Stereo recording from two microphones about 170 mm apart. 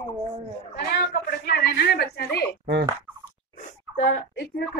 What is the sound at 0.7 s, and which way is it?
A woman's voice, 70° left (ahead or behind).